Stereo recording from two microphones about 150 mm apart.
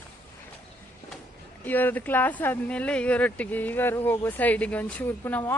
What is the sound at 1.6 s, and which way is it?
Speech, 10° left (ahead or behind).